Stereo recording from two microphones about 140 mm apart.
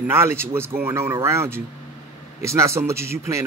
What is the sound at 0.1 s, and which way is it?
Speech, 15° right (ahead or behind).